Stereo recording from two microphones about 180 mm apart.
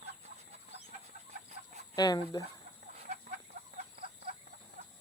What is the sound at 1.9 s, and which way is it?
Speech, 20° left (ahead or behind).